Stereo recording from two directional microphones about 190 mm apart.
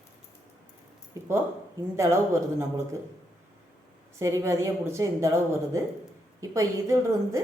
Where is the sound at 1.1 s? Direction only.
15° right (ahead or behind).